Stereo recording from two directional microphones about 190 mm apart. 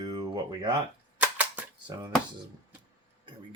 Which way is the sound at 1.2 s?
5° right (ahead or behind).